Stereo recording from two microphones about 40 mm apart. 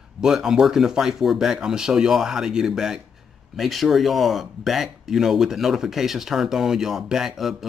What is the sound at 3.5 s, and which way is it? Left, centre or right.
Speech, centre.